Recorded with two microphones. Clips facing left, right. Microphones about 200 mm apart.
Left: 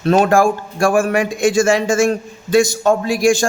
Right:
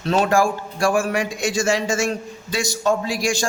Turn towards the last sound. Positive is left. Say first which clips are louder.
# left 8 dB
turn(degrees=50)  # may be behind; listen again after turning